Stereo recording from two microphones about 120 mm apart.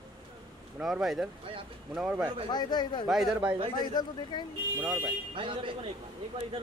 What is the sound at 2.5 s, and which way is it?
Speech, 35° left (ahead or behind).